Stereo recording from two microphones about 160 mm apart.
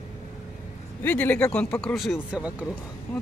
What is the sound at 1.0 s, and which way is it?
Speech, 10° left (ahead or behind).